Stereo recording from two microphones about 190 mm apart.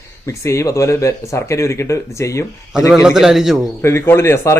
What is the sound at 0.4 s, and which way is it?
A man's voice, 15° left (ahead or behind).